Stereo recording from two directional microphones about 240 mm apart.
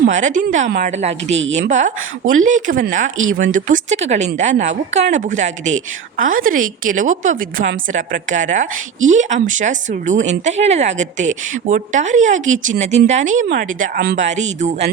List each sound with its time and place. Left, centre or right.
0.0 s a woman's voice: right
9.0 s speech: right
9.5 s speech: right
14.3 s a woman's voice: right